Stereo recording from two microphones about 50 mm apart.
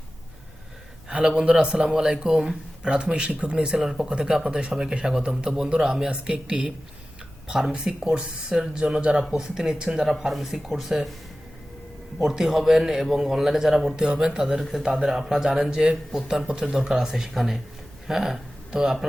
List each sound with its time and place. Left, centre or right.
1.0 s a sound: centre
1.4 s a man's voice: centre
2.3 s speech: centre
2.8 s speech: centre
3.8 s a man's voice: centre
12.2 s a man's voice: centre